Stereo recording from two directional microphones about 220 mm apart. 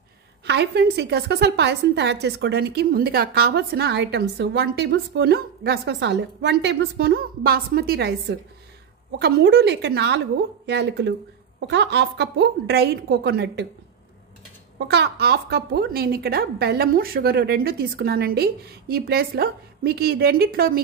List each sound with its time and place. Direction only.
0.5 s a woman's voice: 50° right (ahead or behind)
14.9 s a woman's voice: 50° right (ahead or behind)